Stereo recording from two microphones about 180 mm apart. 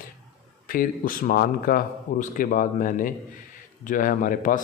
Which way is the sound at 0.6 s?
50° left (ahead or behind).